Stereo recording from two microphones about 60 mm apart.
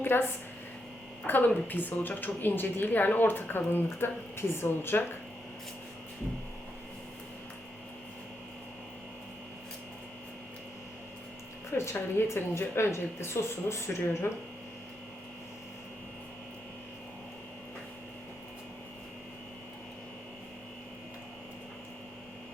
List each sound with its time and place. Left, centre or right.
0.0 s a woman's voice: left
1.5 s a woman's voice: left
11.7 s a woman's voice: left